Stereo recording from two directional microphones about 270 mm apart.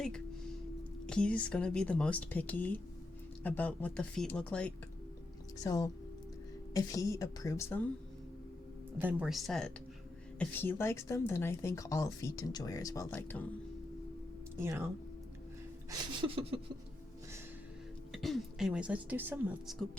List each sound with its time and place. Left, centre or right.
1.0 s speech: centre
9.0 s speech: centre
14.5 s speech: centre
15.9 s a sound: centre
18.1 s speech: centre